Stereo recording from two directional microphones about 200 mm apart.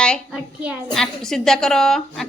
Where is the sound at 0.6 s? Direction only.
5° right (ahead or behind).